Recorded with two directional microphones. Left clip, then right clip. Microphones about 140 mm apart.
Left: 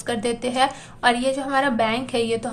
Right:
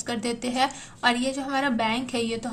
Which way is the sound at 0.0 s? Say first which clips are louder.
Left 5 dB; 10° right (ahead or behind).